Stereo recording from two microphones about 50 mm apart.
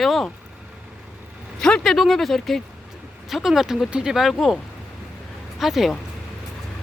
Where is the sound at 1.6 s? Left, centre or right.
Centre.